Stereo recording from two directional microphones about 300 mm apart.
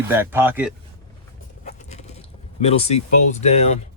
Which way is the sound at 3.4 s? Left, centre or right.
Left.